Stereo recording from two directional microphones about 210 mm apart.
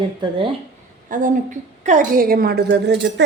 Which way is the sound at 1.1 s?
40° right (ahead or behind).